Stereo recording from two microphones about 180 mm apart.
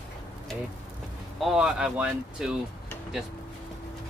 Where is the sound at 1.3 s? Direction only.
Centre (ahead or behind).